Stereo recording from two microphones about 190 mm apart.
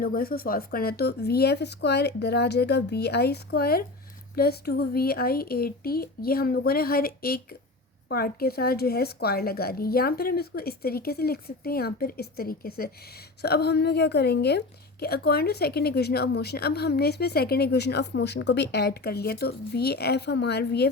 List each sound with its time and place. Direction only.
0.0 s a woman's voice: 50° left (ahead or behind)